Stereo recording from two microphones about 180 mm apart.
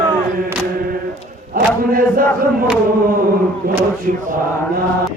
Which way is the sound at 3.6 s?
60° right (ahead or behind).